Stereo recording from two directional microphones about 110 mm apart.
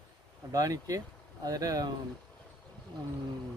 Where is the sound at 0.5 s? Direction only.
30° right (ahead or behind).